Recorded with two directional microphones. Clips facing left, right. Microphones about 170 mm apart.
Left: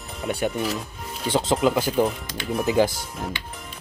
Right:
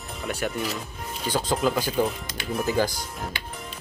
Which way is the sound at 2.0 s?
Centre (ahead or behind).